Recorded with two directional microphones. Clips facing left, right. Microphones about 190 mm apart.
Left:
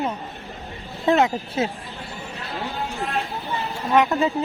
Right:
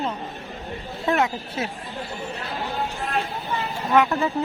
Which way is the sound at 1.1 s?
25° left (ahead or behind).